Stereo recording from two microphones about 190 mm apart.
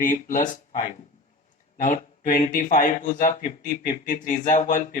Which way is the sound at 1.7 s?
45° left (ahead or behind).